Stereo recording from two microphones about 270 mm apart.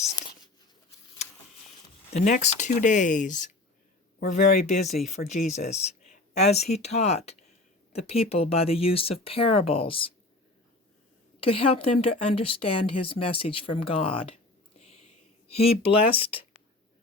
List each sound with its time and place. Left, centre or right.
0.0 s a sound: left
2.1 s a woman's voice: left
11.3 s a woman's voice: left
15.4 s a woman's voice: left